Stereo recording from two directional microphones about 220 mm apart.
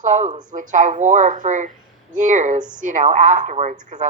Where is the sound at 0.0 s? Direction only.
35° right (ahead or behind).